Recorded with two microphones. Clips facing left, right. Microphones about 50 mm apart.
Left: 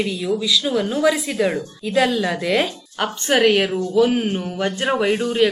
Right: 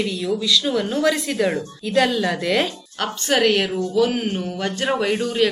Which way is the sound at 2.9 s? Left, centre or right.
Centre.